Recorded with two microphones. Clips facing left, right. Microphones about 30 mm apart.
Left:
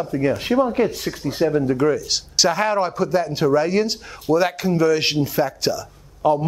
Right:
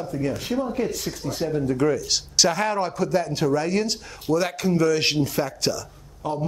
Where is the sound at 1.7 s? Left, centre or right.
Centre.